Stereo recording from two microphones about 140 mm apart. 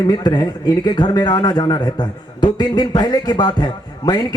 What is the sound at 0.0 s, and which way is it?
A man's voice, 30° left (ahead or behind).